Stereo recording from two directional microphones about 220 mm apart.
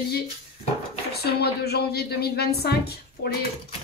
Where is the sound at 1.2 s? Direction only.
45° left (ahead or behind).